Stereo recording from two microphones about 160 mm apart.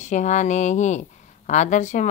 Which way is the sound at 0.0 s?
50° left (ahead or behind).